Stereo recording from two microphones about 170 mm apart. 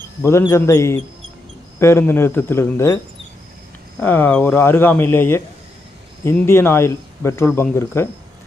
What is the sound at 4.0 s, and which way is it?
Speech, 10° left (ahead or behind).